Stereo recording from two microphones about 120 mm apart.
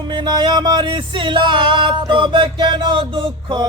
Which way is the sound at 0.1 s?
40° right (ahead or behind).